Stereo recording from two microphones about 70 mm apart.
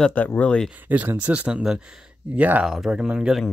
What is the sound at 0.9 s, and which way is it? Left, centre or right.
Speech, right.